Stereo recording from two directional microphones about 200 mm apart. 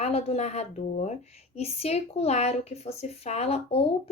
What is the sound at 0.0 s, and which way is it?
Speech, 30° left (ahead or behind).